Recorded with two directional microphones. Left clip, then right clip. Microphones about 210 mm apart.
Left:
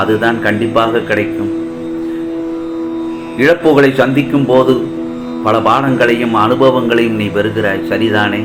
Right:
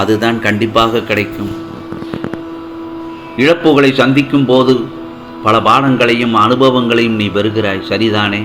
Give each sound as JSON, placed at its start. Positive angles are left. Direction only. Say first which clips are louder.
{"t": 0.0, "sound": "a man's voice", "louder": "even", "side_deg": -45}
{"t": 3.3, "sound": "a man's voice", "louder": "even", "side_deg": -35}